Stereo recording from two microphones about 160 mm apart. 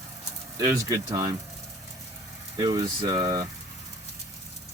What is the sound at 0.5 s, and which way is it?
Speech, 25° right (ahead or behind).